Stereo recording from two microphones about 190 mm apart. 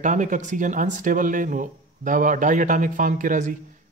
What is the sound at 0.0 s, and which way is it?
Speech, 40° right (ahead or behind).